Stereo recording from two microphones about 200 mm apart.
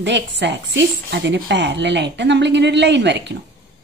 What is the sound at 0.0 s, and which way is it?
Speech, 60° right (ahead or behind).